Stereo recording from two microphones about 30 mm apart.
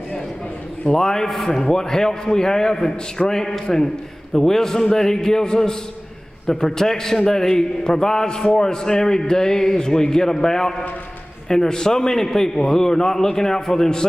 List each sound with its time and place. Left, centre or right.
0.9 s a man's voice: centre
1.3 s a man's voice: centre
1.6 s a man's voice: centre